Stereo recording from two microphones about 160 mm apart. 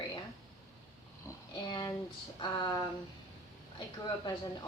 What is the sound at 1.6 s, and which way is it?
Speech, 30° left (ahead or behind).